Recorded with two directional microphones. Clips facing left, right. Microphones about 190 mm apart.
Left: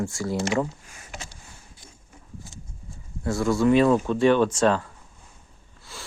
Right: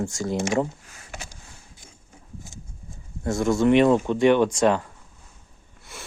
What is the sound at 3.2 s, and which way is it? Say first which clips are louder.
Speech: right 1 dB; 20° right (ahead or behind).